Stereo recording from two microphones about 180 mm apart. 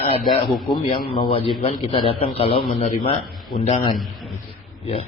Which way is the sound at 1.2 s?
30° left (ahead or behind).